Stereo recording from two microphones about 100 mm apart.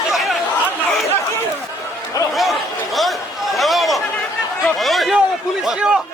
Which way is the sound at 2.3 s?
Centre (ahead or behind).